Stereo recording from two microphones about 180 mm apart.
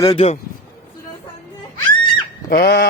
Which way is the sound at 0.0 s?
35° left (ahead or behind).